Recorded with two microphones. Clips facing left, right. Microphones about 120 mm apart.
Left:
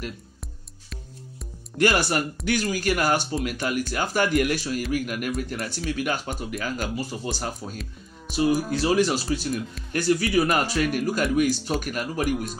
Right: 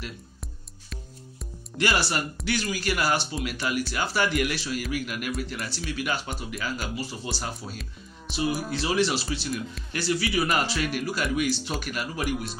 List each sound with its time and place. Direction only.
1.8 s speech: 50° left (ahead or behind)